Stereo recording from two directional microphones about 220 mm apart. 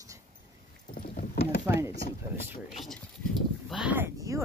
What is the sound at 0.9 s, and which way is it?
Rowboat, 40° left (ahead or behind).